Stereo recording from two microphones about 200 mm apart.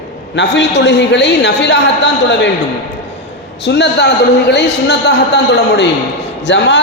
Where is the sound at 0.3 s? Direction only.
60° left (ahead or behind).